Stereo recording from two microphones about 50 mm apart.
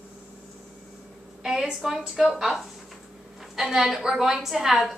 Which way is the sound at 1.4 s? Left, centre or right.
Centre.